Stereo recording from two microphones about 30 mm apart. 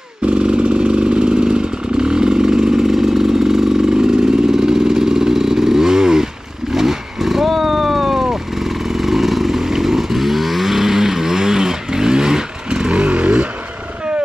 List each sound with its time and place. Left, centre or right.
0.2 s motorcycle: right
2.9 s vehicle: centre; by 13.5 s right